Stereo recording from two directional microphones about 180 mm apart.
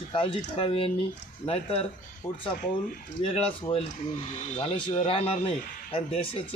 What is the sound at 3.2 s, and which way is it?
Speech, 30° left (ahead or behind).